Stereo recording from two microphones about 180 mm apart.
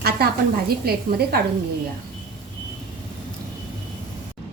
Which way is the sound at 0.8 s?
60° right (ahead or behind).